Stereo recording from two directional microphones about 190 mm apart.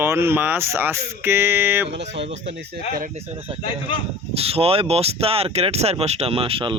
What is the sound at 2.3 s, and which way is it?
Speech, 70° right (ahead or behind).